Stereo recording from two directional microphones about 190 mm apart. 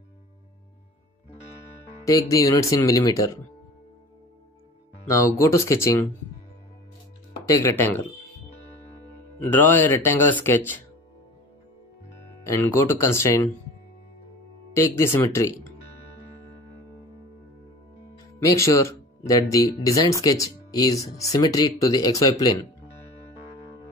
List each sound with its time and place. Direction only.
2.0 s speech: 15° left (ahead or behind)
5.4 s speech: 15° left (ahead or behind)
7.4 s speech: 15° left (ahead or behind)
9.4 s speech: 10° left (ahead or behind)
12.4 s speech: 15° left (ahead or behind)
14.7 s speech: 15° left (ahead or behind)
18.4 s speech: 15° left (ahead or behind)